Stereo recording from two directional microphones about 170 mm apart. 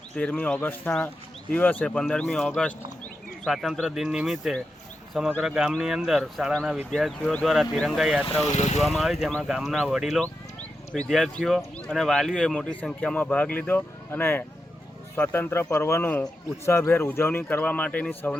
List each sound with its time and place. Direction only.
0.2 s a man's voice: 5° left (ahead or behind)
8.4 s speech: 40° left (ahead or behind)
8.8 s a man's voice: centre (ahead or behind)